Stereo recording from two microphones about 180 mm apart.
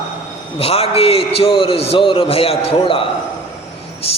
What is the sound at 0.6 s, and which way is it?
A man's voice, 35° left (ahead or behind).